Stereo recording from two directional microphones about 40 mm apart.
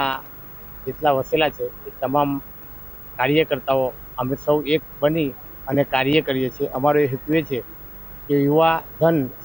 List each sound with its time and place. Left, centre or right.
0.9 s speech: left